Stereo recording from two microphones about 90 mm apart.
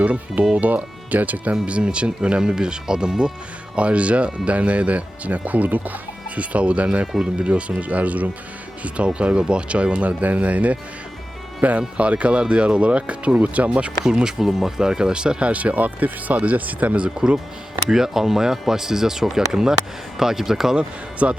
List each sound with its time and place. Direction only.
0.0 s speech: 15° right (ahead or behind)
11.8 s speech: 15° right (ahead or behind)